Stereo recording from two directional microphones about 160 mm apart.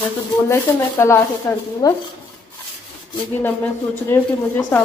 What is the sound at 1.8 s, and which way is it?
Speech, 25° left (ahead or behind).